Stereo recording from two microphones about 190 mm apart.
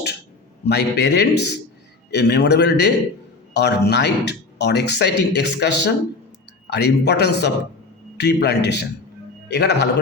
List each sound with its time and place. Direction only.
0.6 s a man's voice: 60° left (ahead or behind)